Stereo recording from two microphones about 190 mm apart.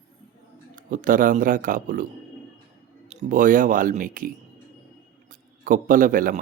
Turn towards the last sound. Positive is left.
turn(degrees=-45)  # may be behind; listen again after turning